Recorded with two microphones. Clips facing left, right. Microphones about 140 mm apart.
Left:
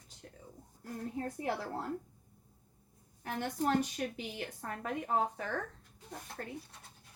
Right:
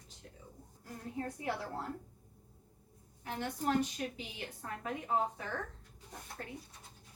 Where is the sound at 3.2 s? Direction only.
50° left (ahead or behind).